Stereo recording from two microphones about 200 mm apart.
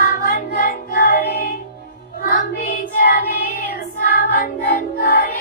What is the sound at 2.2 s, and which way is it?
Child singing, 45° left (ahead or behind).